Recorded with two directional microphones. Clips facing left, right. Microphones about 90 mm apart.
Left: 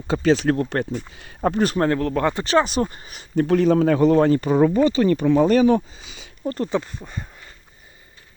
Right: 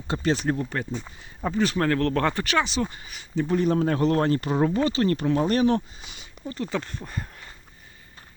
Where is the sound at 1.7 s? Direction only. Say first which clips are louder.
Left 3 dB; 25° left (ahead or behind).